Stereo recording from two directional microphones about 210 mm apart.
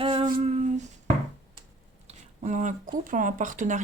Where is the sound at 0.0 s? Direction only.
25° right (ahead or behind).